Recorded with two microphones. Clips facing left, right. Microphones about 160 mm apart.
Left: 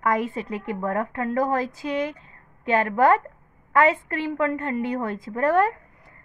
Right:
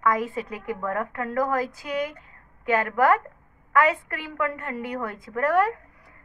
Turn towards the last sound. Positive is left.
turn(degrees=25)  # may be behind; listen again after turning